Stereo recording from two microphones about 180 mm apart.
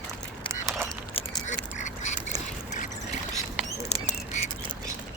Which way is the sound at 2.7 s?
40° left (ahead or behind).